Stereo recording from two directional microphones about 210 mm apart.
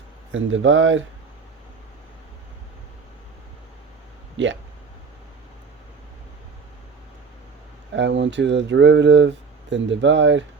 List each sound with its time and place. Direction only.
0.3 s speech: 65° right (ahead or behind)
4.4 s speech: 60° right (ahead or behind)
7.9 s speech: 60° right (ahead or behind)